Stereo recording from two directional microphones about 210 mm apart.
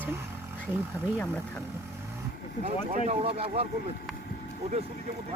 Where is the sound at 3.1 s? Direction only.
30° right (ahead or behind).